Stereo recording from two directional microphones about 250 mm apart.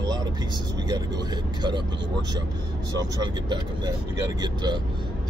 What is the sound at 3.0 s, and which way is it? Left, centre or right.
Speech, centre.